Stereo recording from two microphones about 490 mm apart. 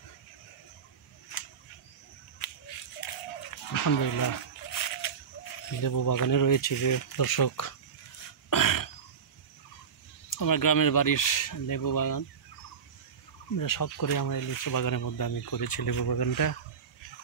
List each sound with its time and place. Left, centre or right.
3.4 s speech: left
8.5 s throat clearing: left
10.3 s speech: left
13.6 s speech: left